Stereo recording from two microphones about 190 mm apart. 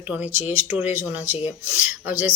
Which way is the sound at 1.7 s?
10° right (ahead or behind).